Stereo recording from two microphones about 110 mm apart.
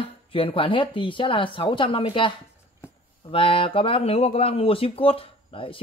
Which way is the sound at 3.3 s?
55° left (ahead or behind).